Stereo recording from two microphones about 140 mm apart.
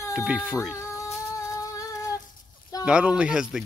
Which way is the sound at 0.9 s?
20° left (ahead or behind).